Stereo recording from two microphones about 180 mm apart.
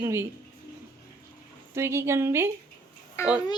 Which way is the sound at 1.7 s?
15° right (ahead or behind).